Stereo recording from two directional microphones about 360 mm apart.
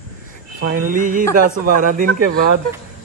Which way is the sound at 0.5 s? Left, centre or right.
Right.